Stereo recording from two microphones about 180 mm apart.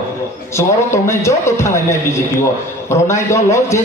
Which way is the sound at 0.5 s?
15° left (ahead or behind).